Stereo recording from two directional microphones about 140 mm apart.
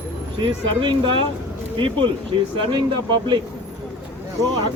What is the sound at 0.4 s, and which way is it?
Speech, 35° right (ahead or behind).